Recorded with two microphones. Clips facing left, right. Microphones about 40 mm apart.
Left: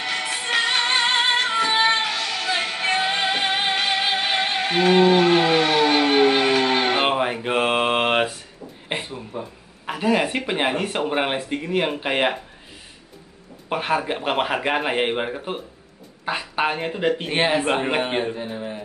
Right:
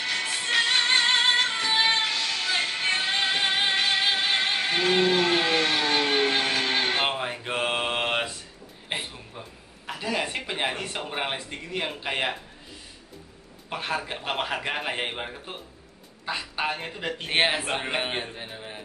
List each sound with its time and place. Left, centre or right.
0.0 s music: centre
4.8 s a sound: left
6.4 s mantra: left
9.3 s speech: left
13.7 s speech: left